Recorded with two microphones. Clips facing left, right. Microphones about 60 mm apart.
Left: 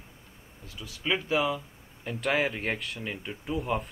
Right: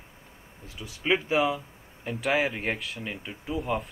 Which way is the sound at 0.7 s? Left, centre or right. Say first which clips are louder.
Right 4 dB; right.